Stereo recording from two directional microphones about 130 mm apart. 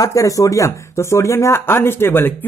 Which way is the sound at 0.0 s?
25° left (ahead or behind).